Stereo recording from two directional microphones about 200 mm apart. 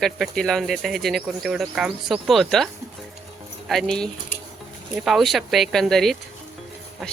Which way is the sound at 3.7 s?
Centre (ahead or behind).